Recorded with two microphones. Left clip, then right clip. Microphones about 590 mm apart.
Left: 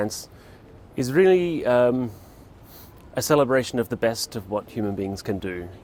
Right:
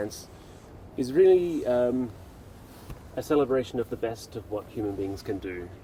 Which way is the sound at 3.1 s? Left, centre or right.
Left.